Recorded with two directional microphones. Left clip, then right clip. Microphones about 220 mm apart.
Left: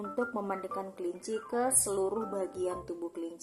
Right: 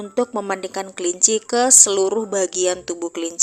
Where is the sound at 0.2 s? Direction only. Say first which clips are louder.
Right 13 dB; 35° right (ahead or behind).